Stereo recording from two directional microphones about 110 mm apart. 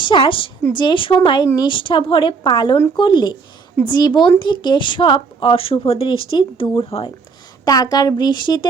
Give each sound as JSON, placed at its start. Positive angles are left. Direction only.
{"t": 0.1, "sound": "speech", "side_deg": 50}
{"t": 7.6, "sound": "speech", "side_deg": 35}